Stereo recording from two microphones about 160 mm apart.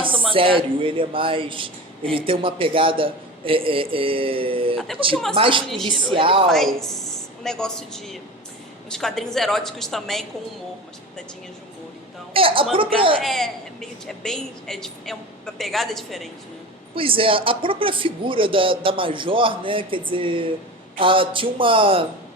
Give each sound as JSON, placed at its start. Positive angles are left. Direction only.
{"t": 0.3, "sound": "a man's voice", "side_deg": -35}
{"t": 6.5, "sound": "a woman's voice", "side_deg": 0}
{"t": 12.3, "sound": "a man's voice", "side_deg": -35}
{"t": 13.2, "sound": "a woman's voice", "side_deg": 0}
{"t": 16.9, "sound": "a man's voice", "side_deg": -35}